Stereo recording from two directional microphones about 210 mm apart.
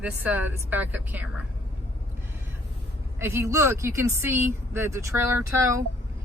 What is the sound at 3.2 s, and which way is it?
Speech, 10° right (ahead or behind).